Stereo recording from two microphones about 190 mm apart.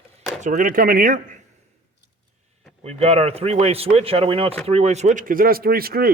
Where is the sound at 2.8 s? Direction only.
35° right (ahead or behind).